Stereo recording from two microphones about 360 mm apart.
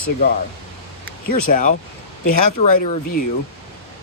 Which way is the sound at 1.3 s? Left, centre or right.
Left.